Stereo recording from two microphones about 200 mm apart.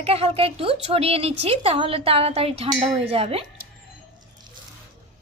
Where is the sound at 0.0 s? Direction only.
30° right (ahead or behind).